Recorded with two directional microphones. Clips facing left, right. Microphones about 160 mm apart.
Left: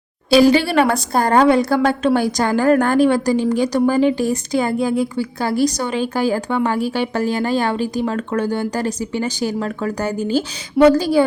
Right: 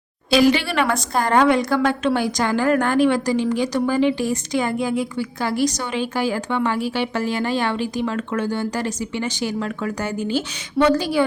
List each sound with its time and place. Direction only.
0.3 s a woman's voice: 35° left (ahead or behind)